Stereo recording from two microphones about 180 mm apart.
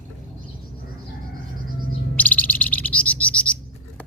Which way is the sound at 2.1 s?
10° left (ahead or behind).